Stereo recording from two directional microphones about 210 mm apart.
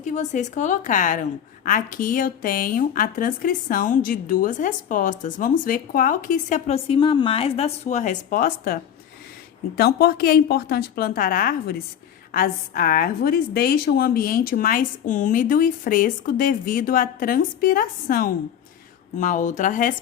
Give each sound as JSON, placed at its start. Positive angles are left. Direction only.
{"t": 0.0, "sound": "a woman's voice", "side_deg": 35}